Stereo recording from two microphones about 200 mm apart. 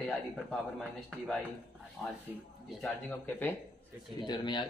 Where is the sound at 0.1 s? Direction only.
Centre (ahead or behind).